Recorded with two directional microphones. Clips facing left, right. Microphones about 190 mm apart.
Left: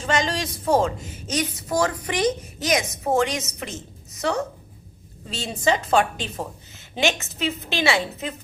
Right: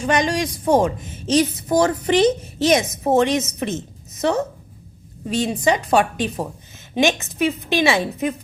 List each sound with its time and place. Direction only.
0.0 s a woman's voice: 15° right (ahead or behind)